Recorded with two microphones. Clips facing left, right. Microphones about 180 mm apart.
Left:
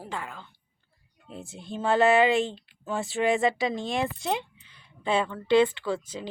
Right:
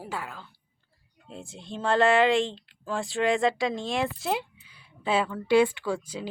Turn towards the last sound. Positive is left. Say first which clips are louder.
# even
turn(degrees=-10)  # may be behind; listen again after turning